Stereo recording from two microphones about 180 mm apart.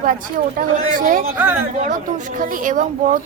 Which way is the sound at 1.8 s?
45° right (ahead or behind).